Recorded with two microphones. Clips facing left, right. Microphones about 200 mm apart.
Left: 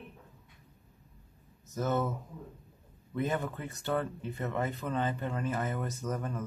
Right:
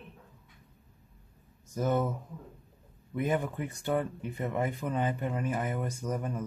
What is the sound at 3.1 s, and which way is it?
Speech, 15° right (ahead or behind).